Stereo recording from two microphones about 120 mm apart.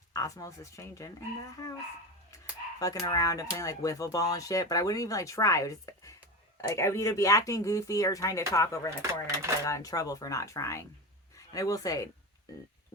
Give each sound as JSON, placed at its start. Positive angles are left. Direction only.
{"t": 0.1, "sound": "speech", "side_deg": 30}
{"t": 2.3, "sound": "a sound", "side_deg": 30}
{"t": 3.5, "sound": "speech", "side_deg": 25}